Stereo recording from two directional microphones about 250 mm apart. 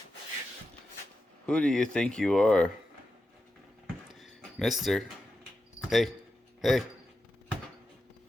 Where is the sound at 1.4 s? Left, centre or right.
Centre.